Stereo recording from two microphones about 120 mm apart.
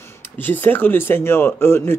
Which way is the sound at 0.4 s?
15° left (ahead or behind).